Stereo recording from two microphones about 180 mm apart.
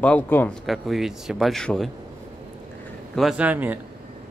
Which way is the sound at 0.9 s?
Centre (ahead or behind).